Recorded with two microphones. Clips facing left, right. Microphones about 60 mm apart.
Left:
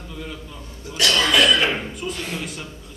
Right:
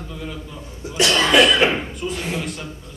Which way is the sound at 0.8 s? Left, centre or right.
Right.